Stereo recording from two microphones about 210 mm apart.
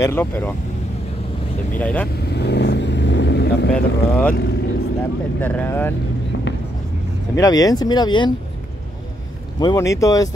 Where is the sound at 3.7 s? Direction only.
5° left (ahead or behind).